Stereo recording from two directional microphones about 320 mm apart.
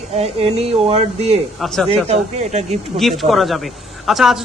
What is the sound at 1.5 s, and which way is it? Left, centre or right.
Speech, centre.